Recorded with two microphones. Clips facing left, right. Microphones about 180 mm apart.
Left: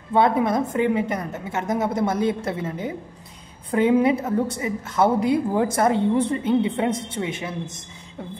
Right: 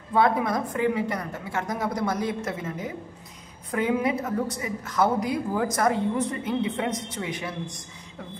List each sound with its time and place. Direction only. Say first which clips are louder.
0.1 s a woman's voice: left 3 dB; 25° left (ahead or behind)